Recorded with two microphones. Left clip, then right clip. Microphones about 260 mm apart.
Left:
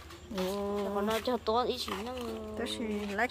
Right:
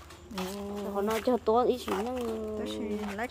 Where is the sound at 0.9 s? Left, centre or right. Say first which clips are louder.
Right 6 dB; right.